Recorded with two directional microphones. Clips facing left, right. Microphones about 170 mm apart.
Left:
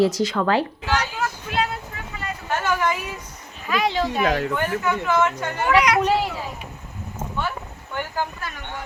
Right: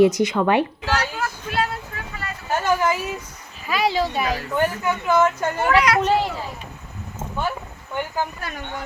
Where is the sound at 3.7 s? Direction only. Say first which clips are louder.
Right 1 dB; 5° right (ahead or behind).